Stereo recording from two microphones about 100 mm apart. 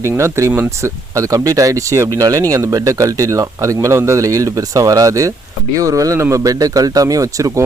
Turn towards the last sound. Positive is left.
turn(degrees=-35)  # may be behind; listen again after turning